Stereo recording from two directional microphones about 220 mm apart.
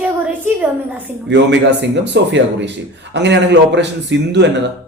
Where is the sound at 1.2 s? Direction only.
50° right (ahead or behind).